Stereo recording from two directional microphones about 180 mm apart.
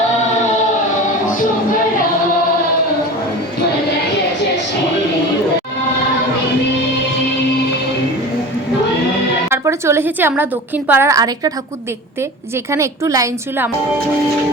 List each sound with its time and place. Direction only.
9.5 s a woman's voice: 15° right (ahead or behind)
12.7 s a woman's voice: 15° right (ahead or behind)